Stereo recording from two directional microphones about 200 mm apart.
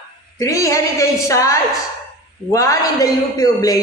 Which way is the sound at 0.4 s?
15° left (ahead or behind).